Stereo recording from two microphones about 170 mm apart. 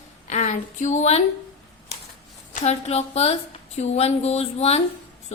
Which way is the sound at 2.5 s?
40° left (ahead or behind).